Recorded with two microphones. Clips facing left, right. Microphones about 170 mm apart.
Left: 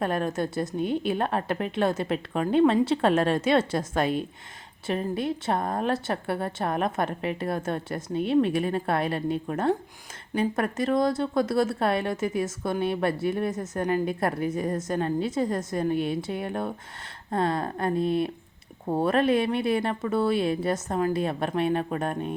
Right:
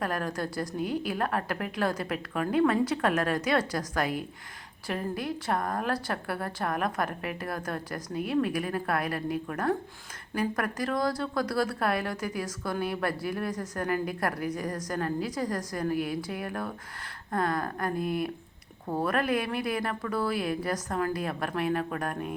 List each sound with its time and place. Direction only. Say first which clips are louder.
0.0 s a woman's voice: left 5 dB; 25° left (ahead or behind)